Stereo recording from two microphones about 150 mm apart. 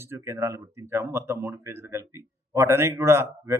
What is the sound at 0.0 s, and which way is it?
A man's voice, 15° right (ahead or behind).